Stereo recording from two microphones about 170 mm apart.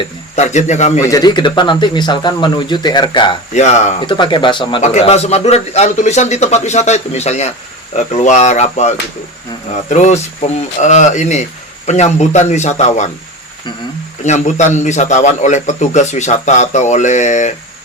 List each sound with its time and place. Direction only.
0.3 s a man's voice: 45° left (ahead or behind)
1.0 s speech: 20° left (ahead or behind)
3.5 s a man's voice: 45° left (ahead or behind)
4.0 s speech: 30° left (ahead or behind)
4.8 s a man's voice: 40° left (ahead or behind)
9.9 s a man's voice: 40° left (ahead or behind)
14.3 s a man's voice: 45° left (ahead or behind)